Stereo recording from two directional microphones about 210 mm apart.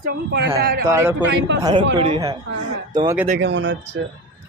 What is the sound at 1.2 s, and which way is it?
Speech, 60° right (ahead or behind).